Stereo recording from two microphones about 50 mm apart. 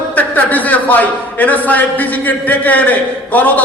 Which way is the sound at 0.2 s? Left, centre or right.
Left.